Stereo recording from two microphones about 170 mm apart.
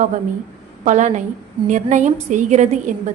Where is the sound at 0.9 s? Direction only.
45° right (ahead or behind).